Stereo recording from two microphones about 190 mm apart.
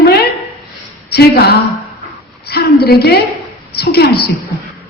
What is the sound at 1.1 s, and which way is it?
A woman's voice, 55° left (ahead or behind).